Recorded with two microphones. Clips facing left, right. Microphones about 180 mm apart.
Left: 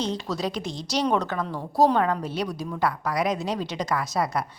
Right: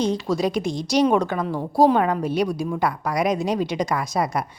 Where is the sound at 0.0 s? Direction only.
10° right (ahead or behind).